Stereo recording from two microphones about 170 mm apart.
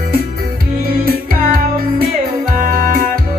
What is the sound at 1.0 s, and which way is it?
Music, 55° right (ahead or behind).